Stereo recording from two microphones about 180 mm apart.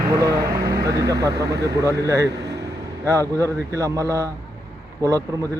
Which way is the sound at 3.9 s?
15° right (ahead or behind).